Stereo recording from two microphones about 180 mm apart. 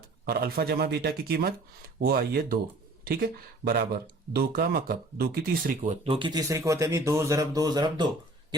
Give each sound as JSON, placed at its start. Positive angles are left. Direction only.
{"t": 0.3, "sound": "speech", "side_deg": -60}
{"t": 6.1, "sound": "speech", "side_deg": -25}